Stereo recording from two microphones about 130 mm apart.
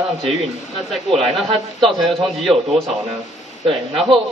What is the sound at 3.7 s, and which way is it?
Speech, 45° right (ahead or behind).